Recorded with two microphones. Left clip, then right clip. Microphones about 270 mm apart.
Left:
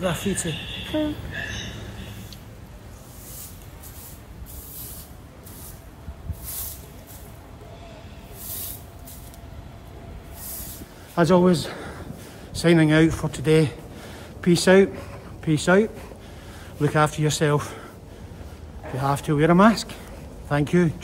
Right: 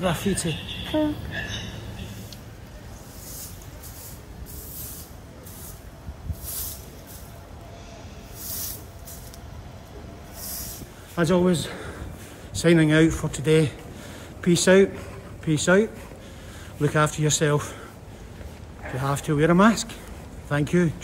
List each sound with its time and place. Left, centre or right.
0.0 s speech: centre
10.4 s vehicle: centre
11.1 s a man's voice: centre
18.9 s speech: centre